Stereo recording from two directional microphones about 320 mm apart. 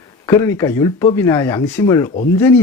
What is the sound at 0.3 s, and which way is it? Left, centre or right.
Speech, centre.